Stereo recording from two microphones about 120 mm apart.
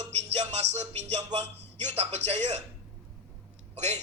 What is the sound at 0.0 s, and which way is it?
Music, 65° right (ahead or behind).